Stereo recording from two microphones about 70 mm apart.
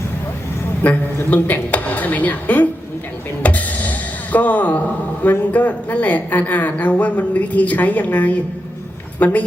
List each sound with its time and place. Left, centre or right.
0.8 s a man's voice: left
3.4 s music: left
5.2 s speech: left